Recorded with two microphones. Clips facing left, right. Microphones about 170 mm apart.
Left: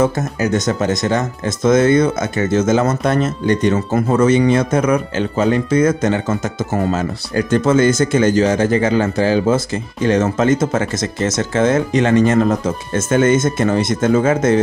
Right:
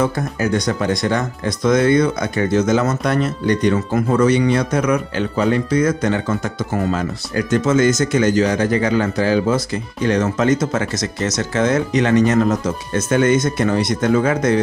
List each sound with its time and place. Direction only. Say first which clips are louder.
0.8 s speech: left 2 dB; 25° left (ahead or behind)